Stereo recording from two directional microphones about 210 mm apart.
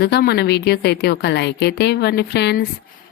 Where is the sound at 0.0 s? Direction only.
50° left (ahead or behind).